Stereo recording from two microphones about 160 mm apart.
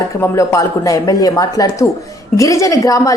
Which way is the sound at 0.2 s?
20° left (ahead or behind).